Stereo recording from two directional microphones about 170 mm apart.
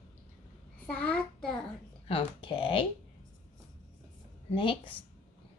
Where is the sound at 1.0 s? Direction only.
5° left (ahead or behind).